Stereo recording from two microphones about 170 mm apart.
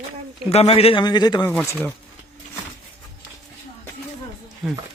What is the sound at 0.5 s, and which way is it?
Speech, 35° left (ahead or behind).